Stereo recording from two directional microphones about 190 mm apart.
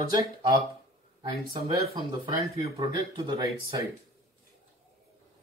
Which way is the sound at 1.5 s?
25° right (ahead or behind).